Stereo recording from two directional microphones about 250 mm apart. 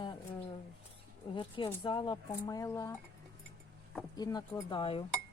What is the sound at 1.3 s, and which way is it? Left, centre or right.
Speech, left.